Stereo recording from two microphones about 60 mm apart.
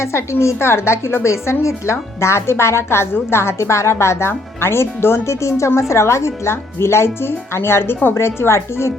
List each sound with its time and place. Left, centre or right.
0.0 s a woman's voice: left